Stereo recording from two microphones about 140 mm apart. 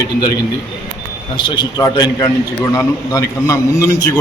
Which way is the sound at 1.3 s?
35° left (ahead or behind).